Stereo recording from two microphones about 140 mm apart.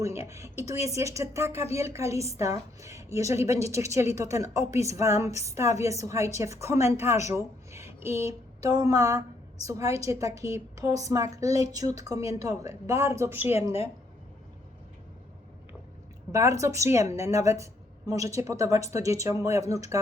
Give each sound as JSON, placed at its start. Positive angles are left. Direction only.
{"t": 0.0, "sound": "speech", "side_deg": -20}
{"t": 16.3, "sound": "speech", "side_deg": -20}